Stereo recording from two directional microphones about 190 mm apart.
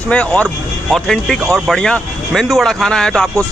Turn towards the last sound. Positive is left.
turn(degrees=0)  # may be behind; listen again after turning